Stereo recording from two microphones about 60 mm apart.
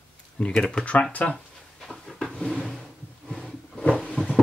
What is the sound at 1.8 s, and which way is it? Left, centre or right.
Drawer open or close, centre.